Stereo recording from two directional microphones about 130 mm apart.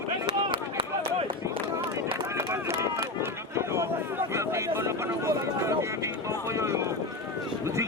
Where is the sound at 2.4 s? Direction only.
20° right (ahead or behind).